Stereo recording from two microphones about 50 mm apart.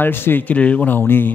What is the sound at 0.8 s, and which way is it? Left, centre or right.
Speech, left.